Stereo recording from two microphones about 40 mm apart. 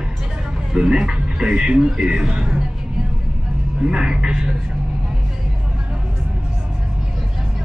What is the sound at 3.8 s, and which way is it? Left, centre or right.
Speech, centre.